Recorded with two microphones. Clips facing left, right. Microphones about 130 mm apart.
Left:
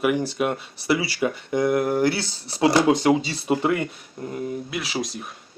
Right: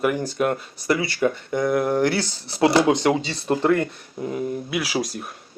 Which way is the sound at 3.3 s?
5° left (ahead or behind).